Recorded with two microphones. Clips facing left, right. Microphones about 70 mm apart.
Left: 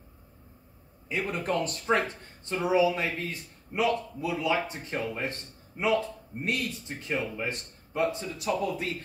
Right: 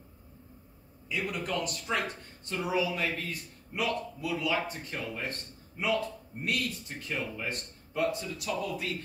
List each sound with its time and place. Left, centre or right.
1.0 s speech: left